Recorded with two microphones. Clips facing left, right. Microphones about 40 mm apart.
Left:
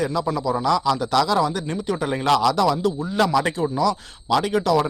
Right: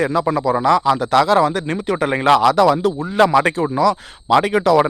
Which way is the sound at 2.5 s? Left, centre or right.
Right.